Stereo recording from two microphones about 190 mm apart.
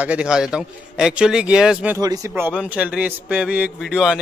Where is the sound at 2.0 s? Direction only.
20° right (ahead or behind).